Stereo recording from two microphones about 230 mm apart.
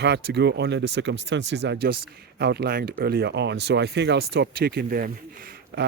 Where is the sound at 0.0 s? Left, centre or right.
Right.